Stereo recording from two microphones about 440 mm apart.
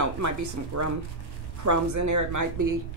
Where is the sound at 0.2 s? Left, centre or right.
Right.